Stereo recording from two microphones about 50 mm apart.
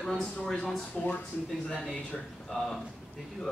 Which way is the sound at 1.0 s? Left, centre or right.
Centre.